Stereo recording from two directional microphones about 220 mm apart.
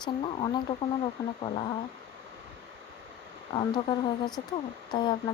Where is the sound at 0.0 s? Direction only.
20° left (ahead or behind).